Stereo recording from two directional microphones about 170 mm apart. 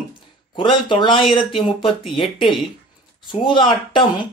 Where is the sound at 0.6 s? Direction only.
30° left (ahead or behind).